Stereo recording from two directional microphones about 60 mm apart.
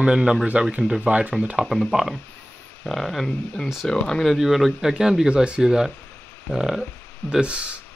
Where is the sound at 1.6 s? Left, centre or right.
Centre.